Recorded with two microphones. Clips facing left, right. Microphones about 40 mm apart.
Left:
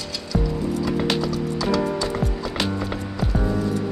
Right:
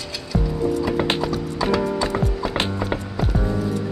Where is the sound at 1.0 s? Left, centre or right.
Right.